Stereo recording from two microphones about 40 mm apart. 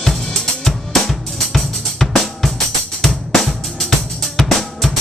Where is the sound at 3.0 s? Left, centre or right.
Centre.